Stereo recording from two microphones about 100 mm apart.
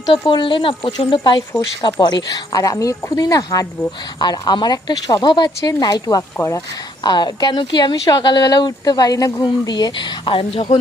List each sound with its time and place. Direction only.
0.1 s speech: 55° left (ahead or behind); by 3.7 s 35° left (ahead or behind)
4.2 s speech: 45° left (ahead or behind); by 10.7 s 65° left (ahead or behind)